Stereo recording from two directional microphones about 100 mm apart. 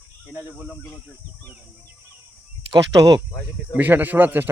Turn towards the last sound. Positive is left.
turn(degrees=-20)  # may be behind; listen again after turning